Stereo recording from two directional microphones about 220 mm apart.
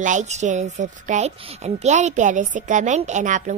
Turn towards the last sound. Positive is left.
turn(degrees=-35)  # may be behind; listen again after turning